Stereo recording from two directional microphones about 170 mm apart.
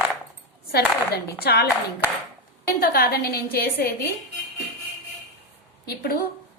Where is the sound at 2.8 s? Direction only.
65° left (ahead or behind).